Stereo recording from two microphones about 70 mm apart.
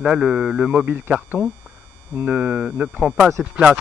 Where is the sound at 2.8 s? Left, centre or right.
Right.